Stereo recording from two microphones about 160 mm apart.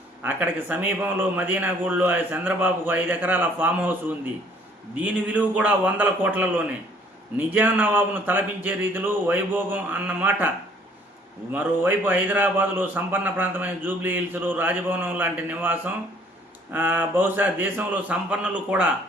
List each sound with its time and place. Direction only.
0.2 s a man's voice: 10° right (ahead or behind)
4.9 s a man's voice: 10° right (ahead or behind)
11.5 s a man's voice: 10° right (ahead or behind)